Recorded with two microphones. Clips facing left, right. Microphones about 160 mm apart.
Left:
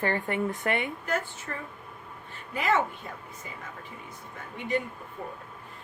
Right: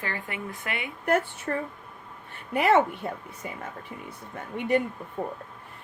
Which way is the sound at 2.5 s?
65° right (ahead or behind).